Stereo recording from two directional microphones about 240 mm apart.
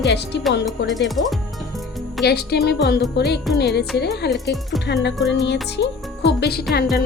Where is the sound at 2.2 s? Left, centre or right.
Left.